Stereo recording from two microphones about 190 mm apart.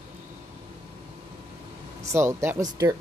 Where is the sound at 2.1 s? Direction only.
15° right (ahead or behind).